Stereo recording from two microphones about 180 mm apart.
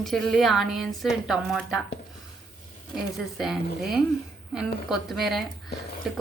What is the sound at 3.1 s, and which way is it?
A woman's voice, centre (ahead or behind).